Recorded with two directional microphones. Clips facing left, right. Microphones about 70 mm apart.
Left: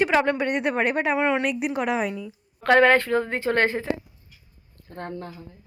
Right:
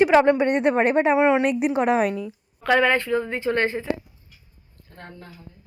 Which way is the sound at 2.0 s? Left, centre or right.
Right.